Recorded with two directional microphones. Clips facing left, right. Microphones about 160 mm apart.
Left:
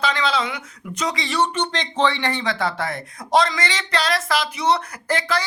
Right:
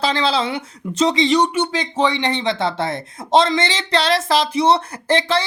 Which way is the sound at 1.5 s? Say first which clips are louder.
Right 3 dB; 10° right (ahead or behind).